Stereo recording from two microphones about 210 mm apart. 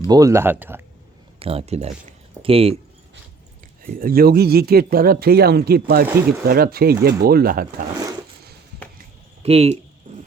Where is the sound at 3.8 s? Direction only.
45° right (ahead or behind).